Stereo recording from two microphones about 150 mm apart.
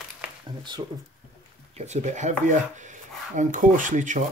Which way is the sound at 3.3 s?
55° right (ahead or behind).